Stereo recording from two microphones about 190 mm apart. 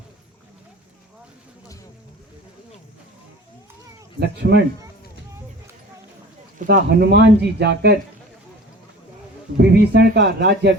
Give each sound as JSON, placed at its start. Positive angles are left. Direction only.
{"t": 4.4, "sound": "speech", "side_deg": -65}
{"t": 6.7, "sound": "speech", "side_deg": -55}
{"t": 9.6, "sound": "speech", "side_deg": -60}